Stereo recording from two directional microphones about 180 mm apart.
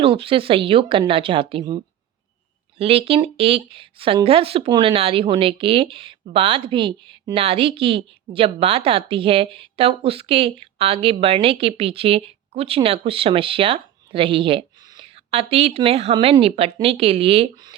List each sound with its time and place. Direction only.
0.0 s a woman's voice: 30° right (ahead or behind)